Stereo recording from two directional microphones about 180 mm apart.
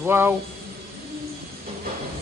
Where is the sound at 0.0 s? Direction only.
10° right (ahead or behind).